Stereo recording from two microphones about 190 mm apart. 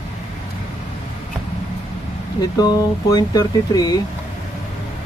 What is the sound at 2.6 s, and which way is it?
Speech, 20° left (ahead or behind).